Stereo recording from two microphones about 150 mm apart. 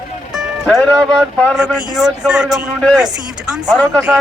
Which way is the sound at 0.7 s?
10° left (ahead or behind).